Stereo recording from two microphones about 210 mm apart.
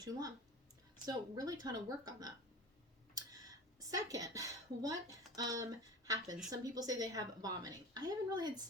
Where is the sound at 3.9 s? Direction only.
15° right (ahead or behind).